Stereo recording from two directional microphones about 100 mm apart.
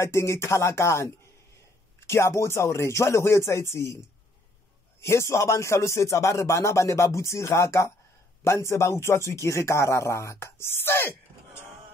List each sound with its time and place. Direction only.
0.0 s speech: 30° left (ahead or behind)
5.0 s speech: 25° left (ahead or behind)